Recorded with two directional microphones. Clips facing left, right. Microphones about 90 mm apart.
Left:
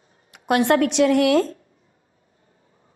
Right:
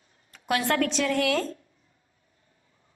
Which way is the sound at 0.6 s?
20° left (ahead or behind).